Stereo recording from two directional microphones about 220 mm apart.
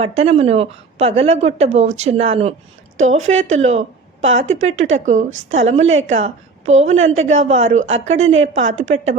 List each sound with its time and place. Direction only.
0.0 s a woman's voice: 25° right (ahead or behind)